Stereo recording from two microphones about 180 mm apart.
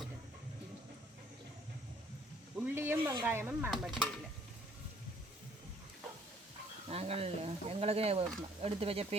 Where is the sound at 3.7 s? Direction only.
Centre (ahead or behind).